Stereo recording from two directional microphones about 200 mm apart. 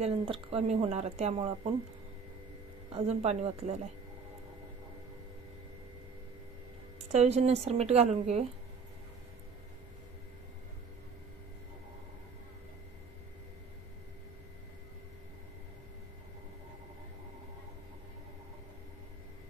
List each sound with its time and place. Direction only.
0.0 s speech: 30° right (ahead or behind)
2.9 s speech: 30° right (ahead or behind)
7.1 s speech: 35° right (ahead or behind)